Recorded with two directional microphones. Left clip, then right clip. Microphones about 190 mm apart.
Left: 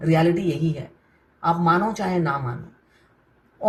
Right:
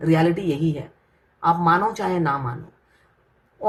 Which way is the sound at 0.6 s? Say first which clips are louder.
Right 3 dB; centre (ahead or behind).